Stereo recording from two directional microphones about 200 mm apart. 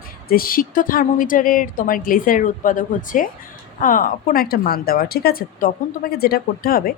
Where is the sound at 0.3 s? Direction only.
45° left (ahead or behind).